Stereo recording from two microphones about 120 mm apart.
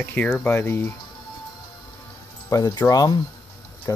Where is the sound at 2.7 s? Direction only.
30° left (ahead or behind).